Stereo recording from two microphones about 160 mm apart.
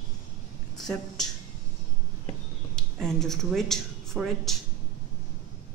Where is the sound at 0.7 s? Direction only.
Centre (ahead or behind).